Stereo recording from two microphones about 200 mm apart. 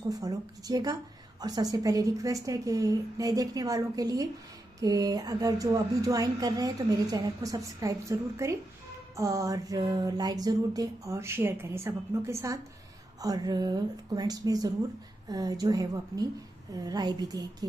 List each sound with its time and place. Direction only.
0.1 s a woman's voice: 20° right (ahead or behind)